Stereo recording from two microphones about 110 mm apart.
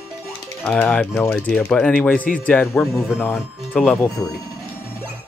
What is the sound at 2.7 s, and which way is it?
Speech, 25° left (ahead or behind).